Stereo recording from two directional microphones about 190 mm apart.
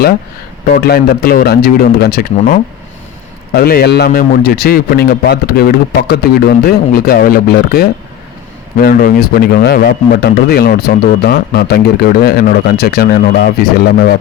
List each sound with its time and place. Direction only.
0.7 s a man's voice: 55° left (ahead or behind)